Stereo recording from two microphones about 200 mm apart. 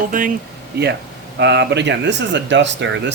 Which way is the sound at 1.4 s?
60° right (ahead or behind).